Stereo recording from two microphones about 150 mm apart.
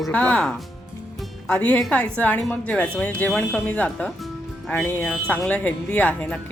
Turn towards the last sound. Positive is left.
turn(degrees=10)  # may be behind; listen again after turning